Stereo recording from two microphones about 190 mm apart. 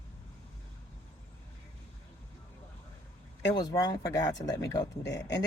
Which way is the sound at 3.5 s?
20° left (ahead or behind).